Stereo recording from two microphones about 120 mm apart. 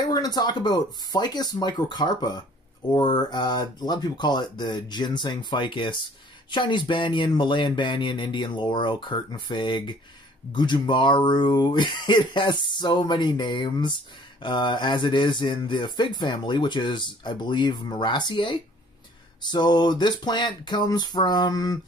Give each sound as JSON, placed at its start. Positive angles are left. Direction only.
{"t": 0.0, "sound": "speech", "side_deg": 35}